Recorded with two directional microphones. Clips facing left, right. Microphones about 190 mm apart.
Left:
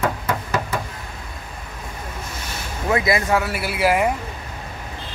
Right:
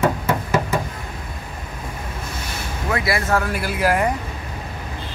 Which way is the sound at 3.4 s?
5° left (ahead or behind).